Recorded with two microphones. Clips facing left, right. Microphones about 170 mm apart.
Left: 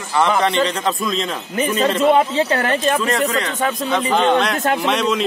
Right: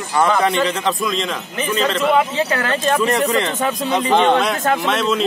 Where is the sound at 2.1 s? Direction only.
30° left (ahead or behind).